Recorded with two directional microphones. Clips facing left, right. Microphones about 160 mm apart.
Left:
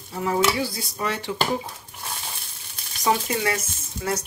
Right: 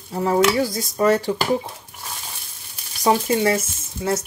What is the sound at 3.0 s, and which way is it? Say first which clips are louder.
Speech: right 5 dB; 30° right (ahead or behind).